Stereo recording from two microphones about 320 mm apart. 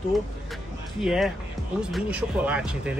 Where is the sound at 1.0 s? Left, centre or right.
Centre.